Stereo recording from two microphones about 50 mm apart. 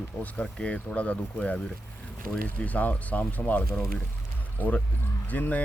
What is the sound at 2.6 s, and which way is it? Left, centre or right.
Speech, left.